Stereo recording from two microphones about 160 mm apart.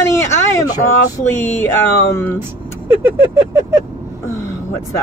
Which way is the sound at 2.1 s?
15° left (ahead or behind).